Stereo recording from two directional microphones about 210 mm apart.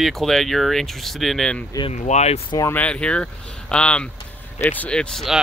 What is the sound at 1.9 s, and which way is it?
Speech, 30° left (ahead or behind).